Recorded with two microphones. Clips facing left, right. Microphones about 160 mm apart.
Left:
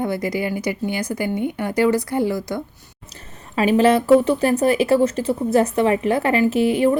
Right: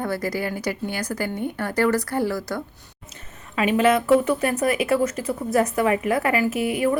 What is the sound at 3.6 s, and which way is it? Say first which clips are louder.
Speech: left 3 dB; 35° left (ahead or behind).